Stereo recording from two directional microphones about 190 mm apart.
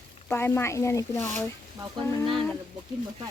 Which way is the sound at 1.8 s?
25° right (ahead or behind).